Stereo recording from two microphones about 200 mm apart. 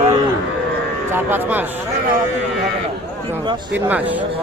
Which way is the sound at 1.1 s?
10° right (ahead or behind).